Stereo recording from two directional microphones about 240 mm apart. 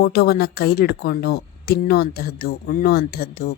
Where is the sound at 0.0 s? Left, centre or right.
Left.